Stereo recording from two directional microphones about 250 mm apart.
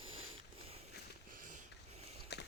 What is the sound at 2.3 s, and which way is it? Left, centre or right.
Horse, left.